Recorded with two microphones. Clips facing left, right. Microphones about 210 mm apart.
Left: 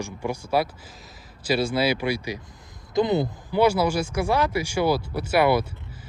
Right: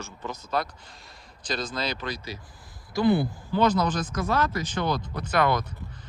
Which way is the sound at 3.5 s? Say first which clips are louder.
Left 3 dB; 10° left (ahead or behind).